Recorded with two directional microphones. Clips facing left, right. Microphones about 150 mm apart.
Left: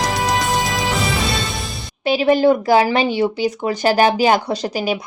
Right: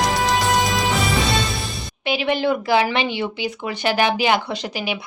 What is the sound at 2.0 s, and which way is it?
Speech, 40° left (ahead or behind).